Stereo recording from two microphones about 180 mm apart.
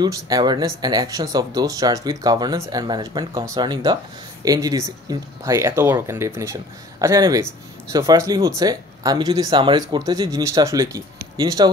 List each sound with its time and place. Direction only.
0.0 s speech: 20° right (ahead or behind)